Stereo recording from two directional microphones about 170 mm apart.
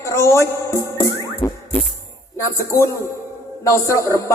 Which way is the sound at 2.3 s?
15° left (ahead or behind).